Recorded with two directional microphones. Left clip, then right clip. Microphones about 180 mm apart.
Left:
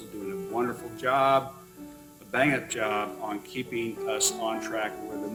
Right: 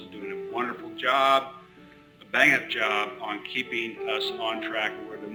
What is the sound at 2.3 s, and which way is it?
Speech, 75° left (ahead or behind).